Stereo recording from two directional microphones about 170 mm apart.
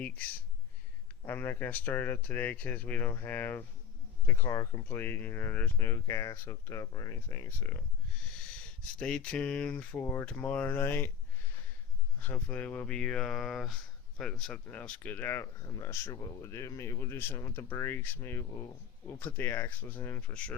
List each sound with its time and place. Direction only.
1.2 s speech: 10° left (ahead or behind)
8.8 s speech: 5° left (ahead or behind)
12.2 s speech: 10° left (ahead or behind)